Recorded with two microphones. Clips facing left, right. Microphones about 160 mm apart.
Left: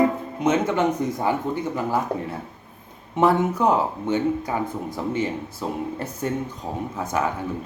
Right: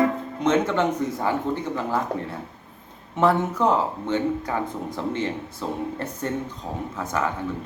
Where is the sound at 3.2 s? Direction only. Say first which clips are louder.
Left 1 dB; 15° left (ahead or behind).